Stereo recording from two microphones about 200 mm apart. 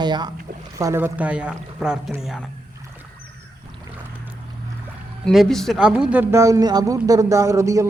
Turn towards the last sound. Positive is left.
turn(degrees=-15)  # may be behind; listen again after turning